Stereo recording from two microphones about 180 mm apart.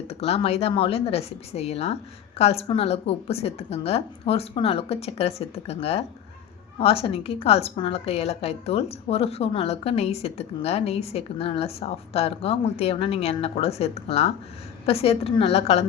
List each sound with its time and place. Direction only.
0.1 s a woman's voice: 35° left (ahead or behind)